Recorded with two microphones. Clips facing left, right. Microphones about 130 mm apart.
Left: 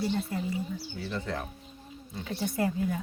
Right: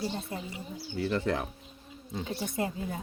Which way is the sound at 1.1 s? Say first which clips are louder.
Right 4 dB; 90° right.